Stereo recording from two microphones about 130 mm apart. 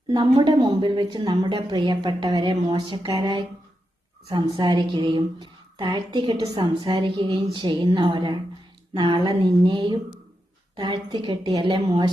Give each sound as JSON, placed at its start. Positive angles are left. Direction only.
{"t": 0.1, "sound": "a woman's voice", "side_deg": -35}